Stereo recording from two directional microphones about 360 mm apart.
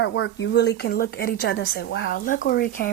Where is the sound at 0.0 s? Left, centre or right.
Left.